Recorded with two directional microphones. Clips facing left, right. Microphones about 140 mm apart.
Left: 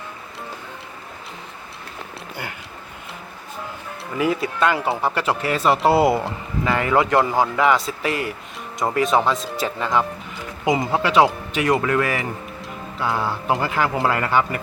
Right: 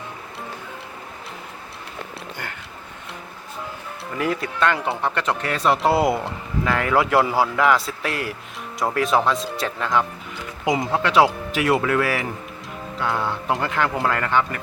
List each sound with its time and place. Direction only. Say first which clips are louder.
4.2 s speech: left 2 dB; 5° left (ahead or behind)